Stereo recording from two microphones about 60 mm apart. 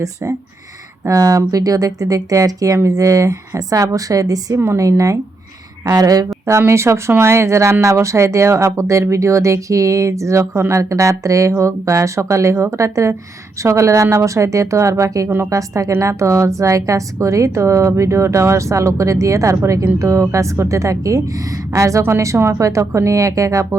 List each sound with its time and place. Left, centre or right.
1.0 s a woman's voice: right
4.6 s a woman's voice: right
5.8 s speech: right
6.6 s a woman's voice: right